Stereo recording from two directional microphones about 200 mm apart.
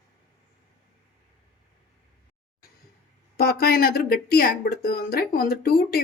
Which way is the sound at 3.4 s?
50° left (ahead or behind).